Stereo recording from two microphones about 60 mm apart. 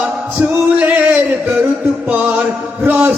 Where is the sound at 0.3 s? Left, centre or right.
Right.